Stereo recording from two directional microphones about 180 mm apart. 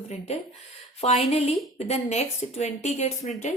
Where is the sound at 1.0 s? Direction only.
35° left (ahead or behind).